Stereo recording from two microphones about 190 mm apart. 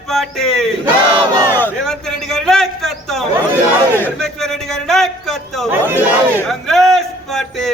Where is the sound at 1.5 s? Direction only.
5° left (ahead or behind).